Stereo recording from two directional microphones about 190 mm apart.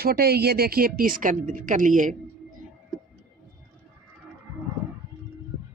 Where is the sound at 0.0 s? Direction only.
55° right (ahead or behind).